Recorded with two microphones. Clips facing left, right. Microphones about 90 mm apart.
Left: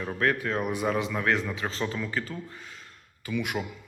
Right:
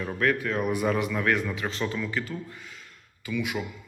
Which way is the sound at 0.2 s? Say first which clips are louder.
Right 1 dB; 25° left (ahead or behind).